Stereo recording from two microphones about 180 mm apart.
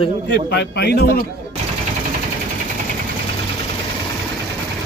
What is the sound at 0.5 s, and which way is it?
Speech, 65° left (ahead or behind).